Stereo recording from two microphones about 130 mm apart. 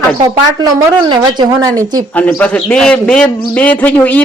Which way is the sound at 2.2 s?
10° left (ahead or behind).